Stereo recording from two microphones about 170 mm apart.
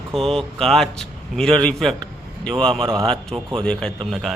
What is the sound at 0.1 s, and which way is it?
A man's voice, centre (ahead or behind).